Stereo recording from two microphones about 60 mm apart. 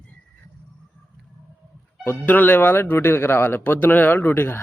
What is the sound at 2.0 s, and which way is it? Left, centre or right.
Speech, left.